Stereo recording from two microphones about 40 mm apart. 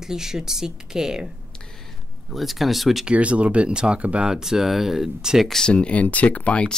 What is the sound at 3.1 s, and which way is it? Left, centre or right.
Speech, right.